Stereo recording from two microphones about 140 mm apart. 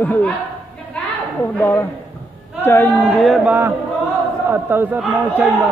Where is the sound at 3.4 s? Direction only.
15° right (ahead or behind).